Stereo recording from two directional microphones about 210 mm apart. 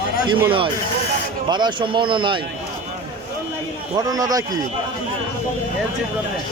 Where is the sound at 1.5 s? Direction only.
20° right (ahead or behind).